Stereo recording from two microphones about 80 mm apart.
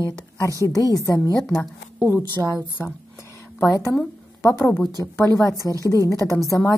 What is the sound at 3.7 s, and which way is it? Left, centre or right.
A woman's voice, left.